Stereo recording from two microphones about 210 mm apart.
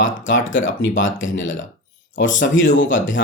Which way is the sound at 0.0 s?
65° left (ahead or behind).